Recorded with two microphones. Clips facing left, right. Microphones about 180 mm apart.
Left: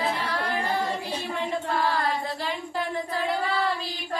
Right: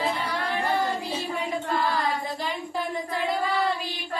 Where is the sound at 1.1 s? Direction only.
5° right (ahead or behind).